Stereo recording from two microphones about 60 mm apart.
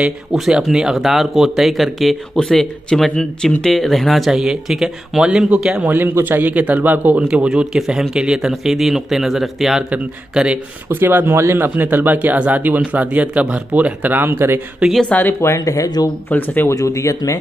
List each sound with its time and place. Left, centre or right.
0.3 s speech: centre
4.3 s speech: centre
5.9 s speech: right
7.2 s speech: centre
9.8 s speech: right
10.9 s speech: right
15.0 s speech: left
15.4 s speech: left
16.3 s speech: left
16.6 s speech: left